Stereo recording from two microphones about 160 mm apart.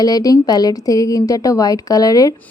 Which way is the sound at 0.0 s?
25° left (ahead or behind).